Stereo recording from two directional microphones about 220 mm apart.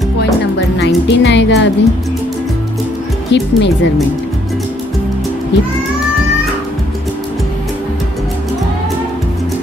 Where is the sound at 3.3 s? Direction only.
50° left (ahead or behind).